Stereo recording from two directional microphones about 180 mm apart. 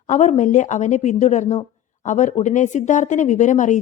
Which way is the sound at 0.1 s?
40° left (ahead or behind).